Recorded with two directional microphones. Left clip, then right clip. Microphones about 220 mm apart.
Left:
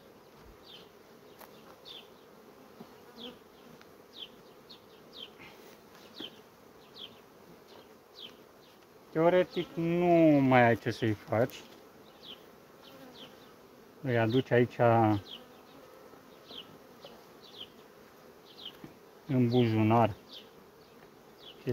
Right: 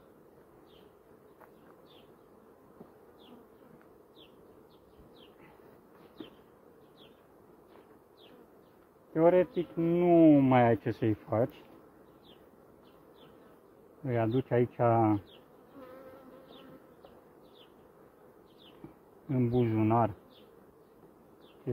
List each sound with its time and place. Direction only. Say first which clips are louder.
9.1 s bee: right 1 dB; 10° right (ahead or behind)
9.8 s speech: right 1 dB; 10° right (ahead or behind)
11.2 s speech: left 3 dB; centre (ahead or behind)
14.0 s speech: left 2 dB; 15° left (ahead or behind)
19.2 s speech: left 2 dB; 20° left (ahead or behind)